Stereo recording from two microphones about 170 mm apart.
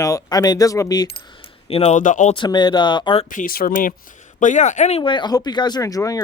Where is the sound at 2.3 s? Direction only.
25° left (ahead or behind).